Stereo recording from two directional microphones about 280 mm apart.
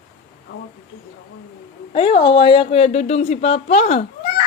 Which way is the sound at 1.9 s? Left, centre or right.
Centre.